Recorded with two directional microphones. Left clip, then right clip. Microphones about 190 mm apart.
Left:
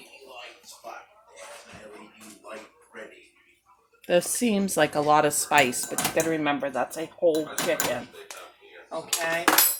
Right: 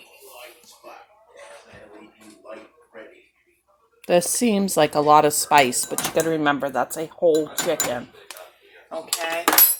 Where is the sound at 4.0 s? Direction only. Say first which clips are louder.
Right 4 dB; 35° right (ahead or behind).